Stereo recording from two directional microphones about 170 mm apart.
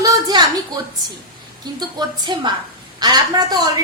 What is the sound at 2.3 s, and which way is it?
Speech, 25° right (ahead or behind).